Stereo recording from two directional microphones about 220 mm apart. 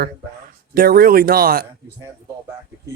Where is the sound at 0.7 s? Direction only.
40° right (ahead or behind).